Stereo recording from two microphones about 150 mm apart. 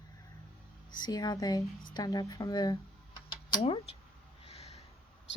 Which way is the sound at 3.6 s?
40° left (ahead or behind).